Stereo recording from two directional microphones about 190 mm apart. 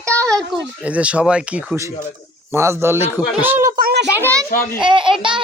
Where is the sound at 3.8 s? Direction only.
50° right (ahead or behind).